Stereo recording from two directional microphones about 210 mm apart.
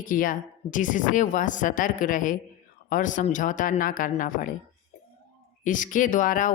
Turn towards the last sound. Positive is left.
turn(degrees=40)  # may be behind; listen again after turning